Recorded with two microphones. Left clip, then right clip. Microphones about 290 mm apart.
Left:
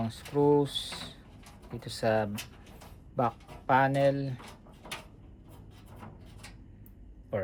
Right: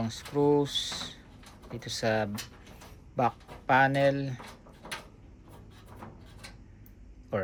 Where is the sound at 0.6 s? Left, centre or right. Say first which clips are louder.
Right 3 dB; right.